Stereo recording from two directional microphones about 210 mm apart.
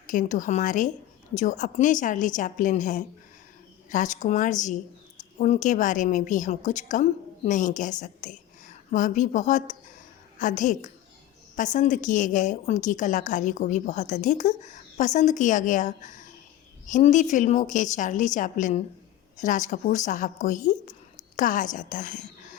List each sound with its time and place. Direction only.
0.1 s a woman's voice: 40° left (ahead or behind)